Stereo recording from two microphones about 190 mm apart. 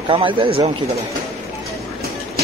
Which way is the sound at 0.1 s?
25° right (ahead or behind).